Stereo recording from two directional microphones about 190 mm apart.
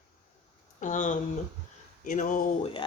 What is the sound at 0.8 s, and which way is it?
Speech, 40° left (ahead or behind).